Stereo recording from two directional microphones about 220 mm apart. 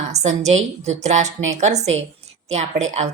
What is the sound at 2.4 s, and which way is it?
Speech, 30° right (ahead or behind).